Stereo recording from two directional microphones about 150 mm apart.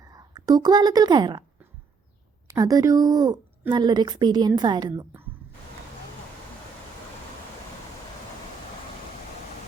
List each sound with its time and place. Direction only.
0.0 s a woman's voice: 25° right (ahead or behind)
2.5 s a woman's voice: 25° right (ahead or behind)